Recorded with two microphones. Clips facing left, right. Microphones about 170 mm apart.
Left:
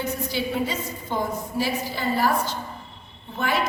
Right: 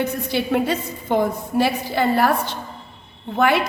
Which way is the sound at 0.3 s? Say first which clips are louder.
Right 7 dB; 65° right (ahead or behind).